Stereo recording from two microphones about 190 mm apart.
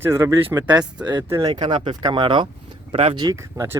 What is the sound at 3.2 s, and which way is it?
Speech, 15° right (ahead or behind).